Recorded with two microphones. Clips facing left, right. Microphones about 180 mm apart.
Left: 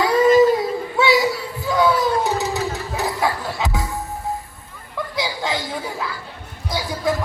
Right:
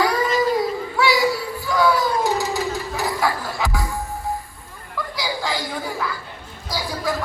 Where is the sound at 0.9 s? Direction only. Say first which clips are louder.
Left 2 dB; 20° left (ahead or behind).